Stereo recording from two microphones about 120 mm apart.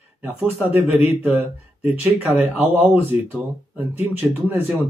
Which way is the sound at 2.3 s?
60° left (ahead or behind).